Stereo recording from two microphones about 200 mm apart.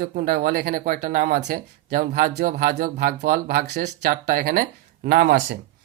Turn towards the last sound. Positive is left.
turn(degrees=-60)  # may be behind; listen again after turning